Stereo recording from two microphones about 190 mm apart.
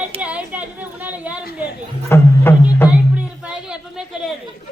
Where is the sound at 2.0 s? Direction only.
15° left (ahead or behind).